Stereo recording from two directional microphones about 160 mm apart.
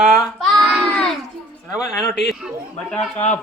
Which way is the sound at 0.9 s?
5° left (ahead or behind).